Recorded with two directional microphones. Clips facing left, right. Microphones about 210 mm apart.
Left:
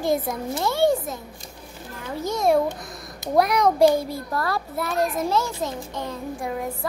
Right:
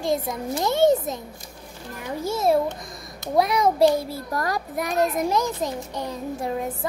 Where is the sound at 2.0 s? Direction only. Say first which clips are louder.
Even; 10° right (ahead or behind).